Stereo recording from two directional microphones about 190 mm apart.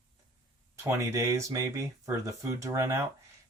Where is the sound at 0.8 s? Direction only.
15° right (ahead or behind).